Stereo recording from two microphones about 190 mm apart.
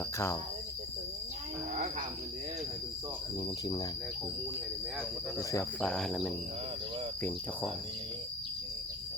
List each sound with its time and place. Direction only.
1.7 s cricket: 45° right (ahead or behind)
5.4 s cricket: 15° left (ahead or behind)
5.8 s cricket: 5° left (ahead or behind)